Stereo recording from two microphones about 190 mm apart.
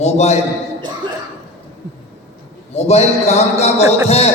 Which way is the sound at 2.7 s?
35° left (ahead or behind).